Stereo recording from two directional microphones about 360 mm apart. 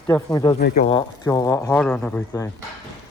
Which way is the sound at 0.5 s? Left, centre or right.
Left.